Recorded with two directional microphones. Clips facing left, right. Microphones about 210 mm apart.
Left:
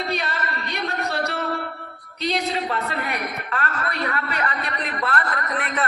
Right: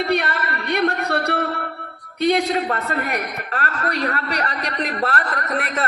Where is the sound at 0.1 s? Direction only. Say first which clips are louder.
Right 5 dB; 60° right (ahead or behind).